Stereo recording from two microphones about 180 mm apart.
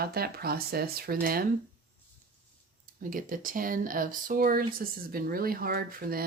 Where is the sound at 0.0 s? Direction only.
60° right (ahead or behind).